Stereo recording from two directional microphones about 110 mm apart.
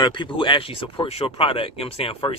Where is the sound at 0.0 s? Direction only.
45° left (ahead or behind).